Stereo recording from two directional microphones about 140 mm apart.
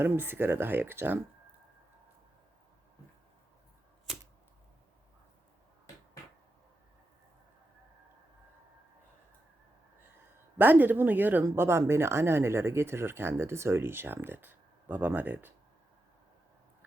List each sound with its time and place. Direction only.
0.0 s speech: 15° right (ahead or behind)
4.1 s a sound: 5° right (ahead or behind)
10.6 s speech: 15° right (ahead or behind)